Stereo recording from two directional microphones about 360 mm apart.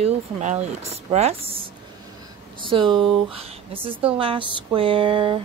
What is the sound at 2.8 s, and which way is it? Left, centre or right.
Speech, centre.